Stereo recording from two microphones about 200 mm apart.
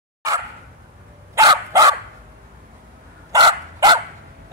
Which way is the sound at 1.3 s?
15° right (ahead or behind).